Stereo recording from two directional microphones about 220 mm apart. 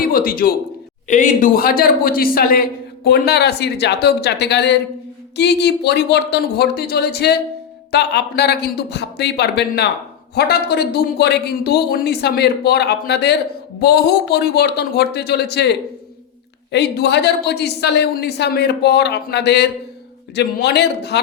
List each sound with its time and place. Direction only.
0.0 s a man's voice: 40° left (ahead or behind)
16.7 s speech: 50° left (ahead or behind)